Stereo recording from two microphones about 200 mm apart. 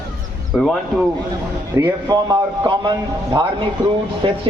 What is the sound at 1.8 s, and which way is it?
A man's voice, 20° right (ahead or behind).